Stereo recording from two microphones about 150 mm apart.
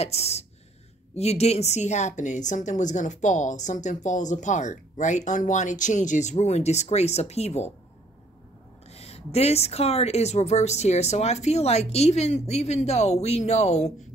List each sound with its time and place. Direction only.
0.0 s a woman's voice: 45° left (ahead or behind)
8.9 s a woman's voice: 45° left (ahead or behind)